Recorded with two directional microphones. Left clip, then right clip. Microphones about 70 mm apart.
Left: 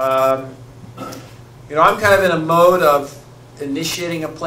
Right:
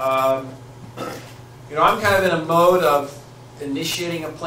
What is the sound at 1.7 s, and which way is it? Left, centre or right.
Speech, left.